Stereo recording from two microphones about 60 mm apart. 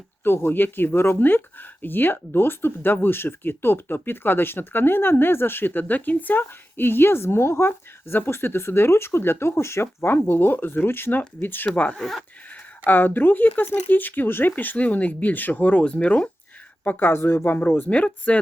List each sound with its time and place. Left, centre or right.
0.3 s speech: left
11.9 s speech: centre
12.8 s speech: left
17.1 s speech: left